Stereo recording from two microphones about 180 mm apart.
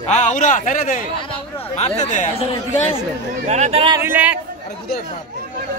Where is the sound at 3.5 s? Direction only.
40° right (ahead or behind).